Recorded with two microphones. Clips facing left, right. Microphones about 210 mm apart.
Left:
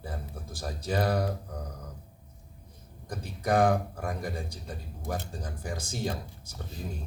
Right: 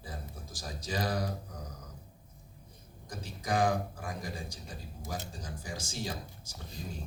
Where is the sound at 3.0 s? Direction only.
60° left (ahead or behind).